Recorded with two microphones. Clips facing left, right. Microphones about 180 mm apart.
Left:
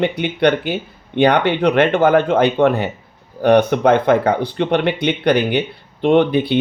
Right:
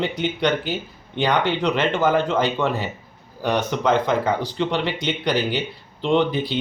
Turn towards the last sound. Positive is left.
turn(degrees=60)  # may be behind; listen again after turning